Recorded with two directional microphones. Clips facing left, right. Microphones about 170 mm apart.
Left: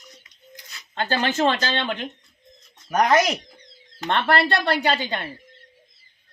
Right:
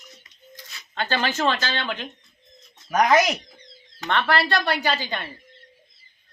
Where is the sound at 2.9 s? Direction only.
Centre (ahead or behind).